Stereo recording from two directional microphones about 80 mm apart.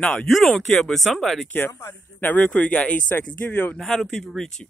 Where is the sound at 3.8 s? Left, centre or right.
Centre.